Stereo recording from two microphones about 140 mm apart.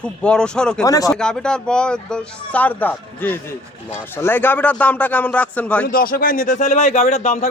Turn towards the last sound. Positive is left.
turn(degrees=55)  # may be behind; listen again after turning